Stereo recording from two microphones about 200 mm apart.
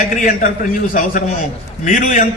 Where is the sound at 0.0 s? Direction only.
40° left (ahead or behind).